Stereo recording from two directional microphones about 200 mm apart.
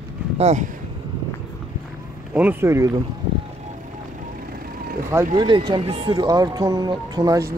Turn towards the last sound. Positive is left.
turn(degrees=-20)  # may be behind; listen again after turning